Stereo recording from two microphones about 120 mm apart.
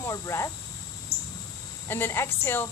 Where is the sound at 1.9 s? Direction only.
20° left (ahead or behind).